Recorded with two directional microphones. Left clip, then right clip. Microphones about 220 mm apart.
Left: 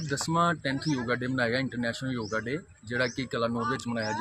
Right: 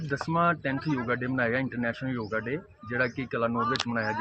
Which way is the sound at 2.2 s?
Centre (ahead or behind).